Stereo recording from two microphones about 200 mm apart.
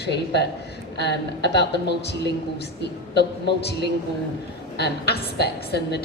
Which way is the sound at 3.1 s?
55° left (ahead or behind).